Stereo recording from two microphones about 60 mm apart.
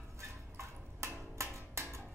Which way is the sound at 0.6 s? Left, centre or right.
Right.